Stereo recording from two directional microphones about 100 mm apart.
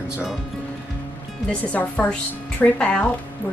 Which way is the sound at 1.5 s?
15° left (ahead or behind).